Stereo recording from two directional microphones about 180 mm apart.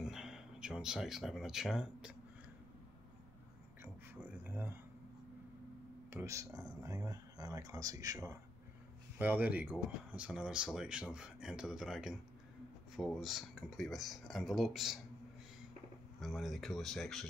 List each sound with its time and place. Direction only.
0.0 s speech: centre (ahead or behind)
4.4 s a sound: 10° right (ahead or behind)
6.1 s speech: 15° right (ahead or behind)
16.2 s speech: centre (ahead or behind)